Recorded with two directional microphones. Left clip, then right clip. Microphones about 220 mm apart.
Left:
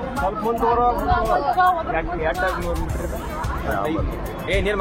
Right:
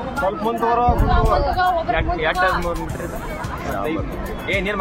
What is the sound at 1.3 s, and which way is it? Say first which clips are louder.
Speech: left 1 dB; 55° right (ahead or behind).